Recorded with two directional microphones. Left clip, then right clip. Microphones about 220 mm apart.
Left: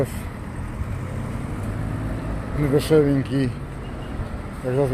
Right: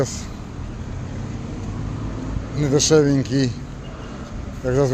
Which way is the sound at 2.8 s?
20° right (ahead or behind).